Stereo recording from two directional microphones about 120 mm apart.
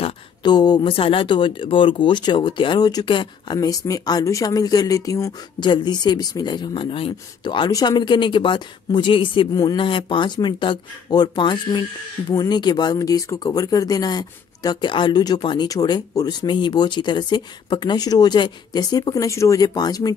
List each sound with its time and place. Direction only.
0.4 s speech: 35° left (ahead or behind)
0.9 s speech: 50° left (ahead or behind)
3.5 s speech: 30° left (ahead or behind)
9.5 s speech: 30° left (ahead or behind)
9.8 s speech: 45° left (ahead or behind)